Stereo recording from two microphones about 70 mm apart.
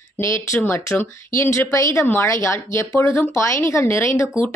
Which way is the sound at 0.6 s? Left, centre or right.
Left.